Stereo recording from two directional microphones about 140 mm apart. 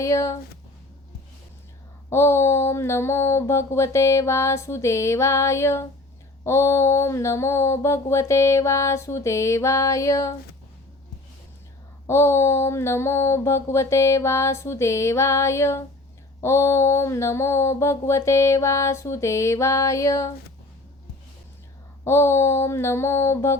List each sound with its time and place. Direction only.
0.0 s mantra: 20° left (ahead or behind)
2.0 s mantra: 20° left (ahead or behind)
12.0 s mantra: 20° left (ahead or behind)
22.0 s mantra: 20° left (ahead or behind)